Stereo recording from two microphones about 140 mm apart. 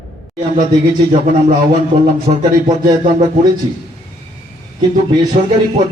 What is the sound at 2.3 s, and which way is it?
Music, 65° right (ahead or behind).